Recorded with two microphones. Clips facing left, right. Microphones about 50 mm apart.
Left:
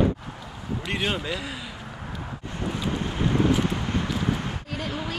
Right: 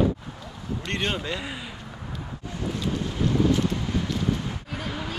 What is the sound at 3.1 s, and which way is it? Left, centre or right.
Wind noise, left.